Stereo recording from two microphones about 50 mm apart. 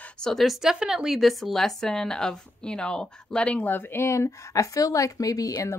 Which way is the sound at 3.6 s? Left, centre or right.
Left.